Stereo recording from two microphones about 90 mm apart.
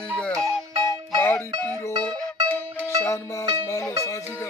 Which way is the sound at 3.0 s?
35° left (ahead or behind).